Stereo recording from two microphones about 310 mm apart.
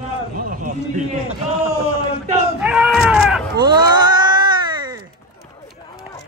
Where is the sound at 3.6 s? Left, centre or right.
Centre.